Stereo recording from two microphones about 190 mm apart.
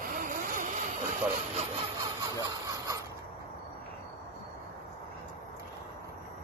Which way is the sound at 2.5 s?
15° right (ahead or behind).